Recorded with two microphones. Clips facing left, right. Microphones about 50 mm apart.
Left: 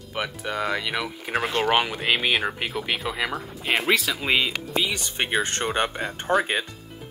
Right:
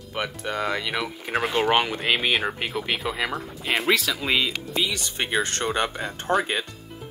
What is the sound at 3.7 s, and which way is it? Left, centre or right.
Speech, centre.